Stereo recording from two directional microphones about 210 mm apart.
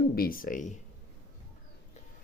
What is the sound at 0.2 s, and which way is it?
Speech, 45° left (ahead or behind).